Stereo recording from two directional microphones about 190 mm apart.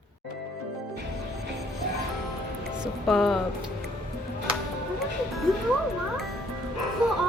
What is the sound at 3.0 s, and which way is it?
Speech, centre (ahead or behind).